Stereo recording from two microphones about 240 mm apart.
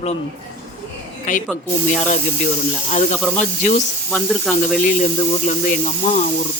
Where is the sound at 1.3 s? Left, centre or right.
Left.